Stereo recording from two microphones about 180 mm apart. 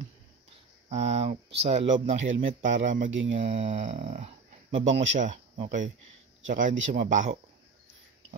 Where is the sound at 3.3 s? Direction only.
40° right (ahead or behind).